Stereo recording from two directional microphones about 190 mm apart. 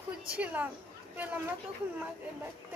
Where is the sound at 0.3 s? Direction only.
10° right (ahead or behind).